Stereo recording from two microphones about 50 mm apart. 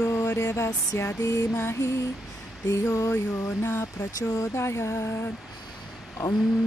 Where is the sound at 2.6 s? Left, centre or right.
Left.